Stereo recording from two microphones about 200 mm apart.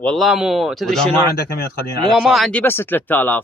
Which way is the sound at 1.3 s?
50° left (ahead or behind).